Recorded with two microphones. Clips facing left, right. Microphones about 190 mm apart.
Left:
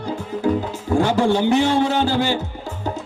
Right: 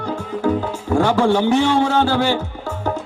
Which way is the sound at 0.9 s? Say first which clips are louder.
Right 1 dB; 15° left (ahead or behind).